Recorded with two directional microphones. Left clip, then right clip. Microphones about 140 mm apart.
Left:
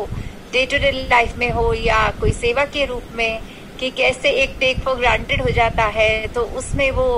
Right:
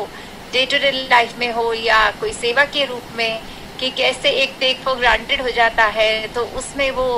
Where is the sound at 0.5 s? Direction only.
30° left (ahead or behind).